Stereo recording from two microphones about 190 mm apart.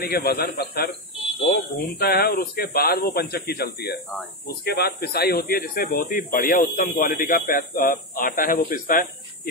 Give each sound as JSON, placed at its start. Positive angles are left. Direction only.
{"t": 0.0, "sound": "speech", "side_deg": 55}